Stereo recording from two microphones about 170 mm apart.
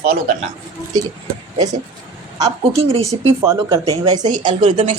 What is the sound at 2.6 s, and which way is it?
Speech, 35° right (ahead or behind).